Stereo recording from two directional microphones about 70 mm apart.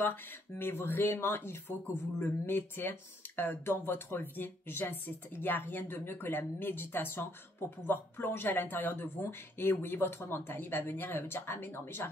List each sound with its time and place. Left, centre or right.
0.1 s speech: left